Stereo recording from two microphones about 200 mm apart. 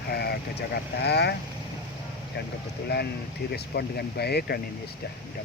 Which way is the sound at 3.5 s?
55° left (ahead or behind).